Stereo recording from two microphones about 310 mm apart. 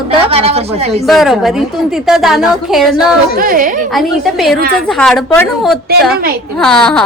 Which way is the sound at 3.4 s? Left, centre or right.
Right.